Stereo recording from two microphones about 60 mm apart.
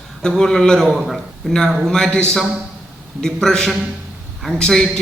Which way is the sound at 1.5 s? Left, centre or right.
Centre.